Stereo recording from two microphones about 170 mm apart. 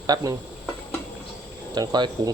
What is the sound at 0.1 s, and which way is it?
Speech, 20° right (ahead or behind).